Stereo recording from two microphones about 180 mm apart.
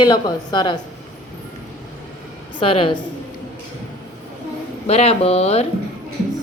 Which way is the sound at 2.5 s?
30° left (ahead or behind).